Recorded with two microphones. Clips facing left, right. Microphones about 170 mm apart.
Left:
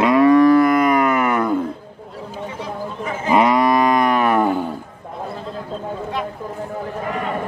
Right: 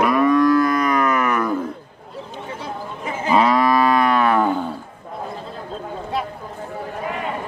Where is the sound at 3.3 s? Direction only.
15° left (ahead or behind).